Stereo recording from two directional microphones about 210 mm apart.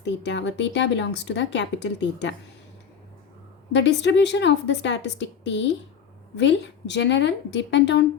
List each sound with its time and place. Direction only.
0.0 s speech: 55° left (ahead or behind)
3.7 s speech: 55° left (ahead or behind)